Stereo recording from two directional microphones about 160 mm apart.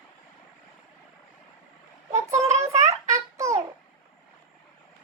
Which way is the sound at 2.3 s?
20° right (ahead or behind).